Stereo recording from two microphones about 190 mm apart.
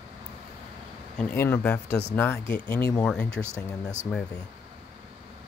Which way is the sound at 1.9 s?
60° left (ahead or behind).